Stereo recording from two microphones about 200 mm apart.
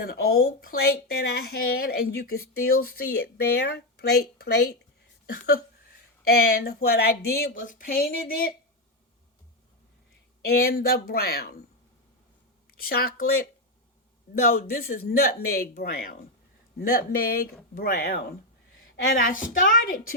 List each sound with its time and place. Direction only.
0.0 s a woman's voice: 50° left (ahead or behind)
5.2 s a sound: 50° left (ahead or behind)
6.2 s a woman's voice: 50° left (ahead or behind)
10.4 s a woman's voice: 50° left (ahead or behind)
12.7 s a woman's voice: 50° left (ahead or behind)
14.5 s a woman's voice: 50° left (ahead or behind)